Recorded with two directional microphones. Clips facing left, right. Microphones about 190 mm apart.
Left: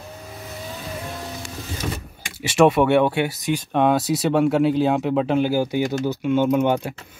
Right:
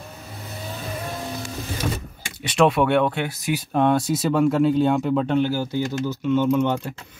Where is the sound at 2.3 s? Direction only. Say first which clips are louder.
Left 3 dB; 5° left (ahead or behind).